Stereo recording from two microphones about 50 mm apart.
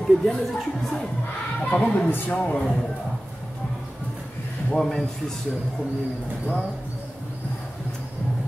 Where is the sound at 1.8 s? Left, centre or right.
Left.